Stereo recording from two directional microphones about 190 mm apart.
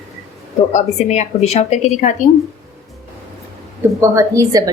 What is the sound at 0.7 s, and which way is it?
A woman's voice, 40° left (ahead or behind).